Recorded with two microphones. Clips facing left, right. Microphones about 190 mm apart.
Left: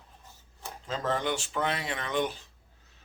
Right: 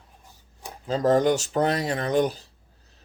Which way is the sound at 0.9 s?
40° right (ahead or behind).